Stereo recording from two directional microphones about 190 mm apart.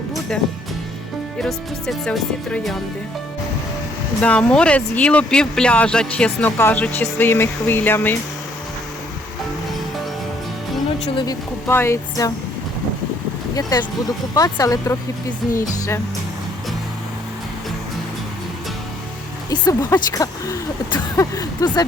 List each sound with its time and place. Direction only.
1.4 s speech: centre (ahead or behind)
4.2 s speech: 5° left (ahead or behind)
11.1 s speech: 25° left (ahead or behind)
11.7 s speech: 15° left (ahead or behind)
13.6 s speech: 20° left (ahead or behind)
19.5 s speech: 15° left (ahead or behind)